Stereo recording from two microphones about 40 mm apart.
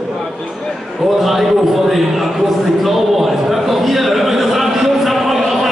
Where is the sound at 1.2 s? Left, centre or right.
Centre.